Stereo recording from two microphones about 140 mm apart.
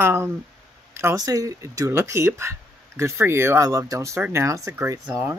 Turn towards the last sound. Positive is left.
turn(degrees=-20)  # may be behind; listen again after turning